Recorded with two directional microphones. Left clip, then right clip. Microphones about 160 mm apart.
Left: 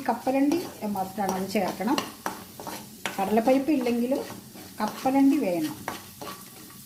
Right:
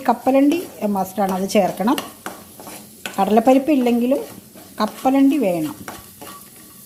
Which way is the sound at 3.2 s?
65° right (ahead or behind).